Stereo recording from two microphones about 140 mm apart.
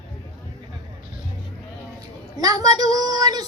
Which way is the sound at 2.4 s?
25° right (ahead or behind).